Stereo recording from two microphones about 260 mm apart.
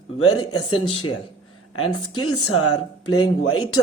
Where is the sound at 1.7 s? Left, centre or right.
Left.